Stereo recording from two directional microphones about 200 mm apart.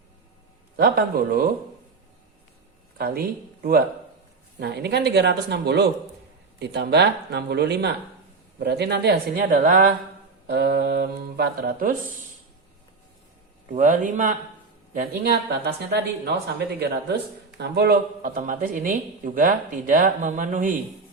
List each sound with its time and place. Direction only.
0.8 s speech: 50° right (ahead or behind)
3.0 s speech: 50° right (ahead or behind)
13.7 s speech: 40° right (ahead or behind)